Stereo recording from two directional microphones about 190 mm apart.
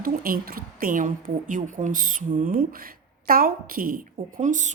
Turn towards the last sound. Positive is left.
turn(degrees=-40)  # may be behind; listen again after turning